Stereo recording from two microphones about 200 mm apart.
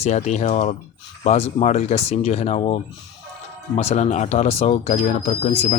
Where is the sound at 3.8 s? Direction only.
35° left (ahead or behind).